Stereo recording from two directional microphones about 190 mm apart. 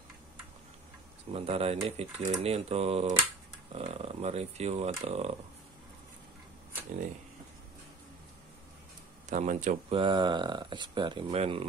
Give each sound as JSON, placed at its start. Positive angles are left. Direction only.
{"t": 1.3, "sound": "speech", "side_deg": -30}
{"t": 9.3, "sound": "speech", "side_deg": -40}
{"t": 9.9, "sound": "speech", "side_deg": -25}